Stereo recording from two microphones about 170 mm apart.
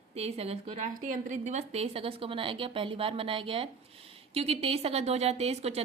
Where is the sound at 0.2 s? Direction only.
35° right (ahead or behind).